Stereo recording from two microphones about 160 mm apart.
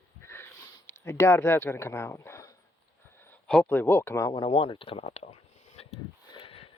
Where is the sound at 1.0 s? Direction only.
15° left (ahead or behind).